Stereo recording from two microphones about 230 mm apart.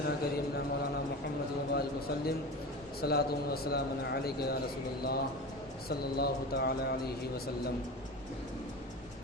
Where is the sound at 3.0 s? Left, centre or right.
Left.